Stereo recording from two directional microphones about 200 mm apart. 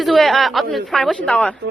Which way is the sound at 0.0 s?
Centre (ahead or behind).